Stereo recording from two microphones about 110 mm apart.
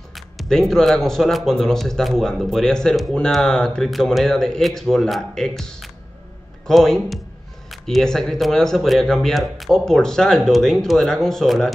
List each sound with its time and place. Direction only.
0.1 s speech: centre (ahead or behind)